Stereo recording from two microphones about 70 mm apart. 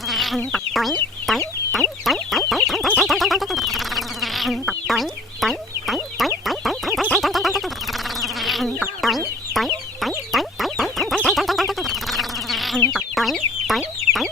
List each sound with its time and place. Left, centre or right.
0.1 s chicken: centre
1.3 s fowl: centre
2.5 s chicken: centre
3.0 s insect: centre
7.2 s a sound: centre
8.2 s insect: centre
9.0 s chicken: centre
11.3 s insect: centre
12.9 s chicken: centre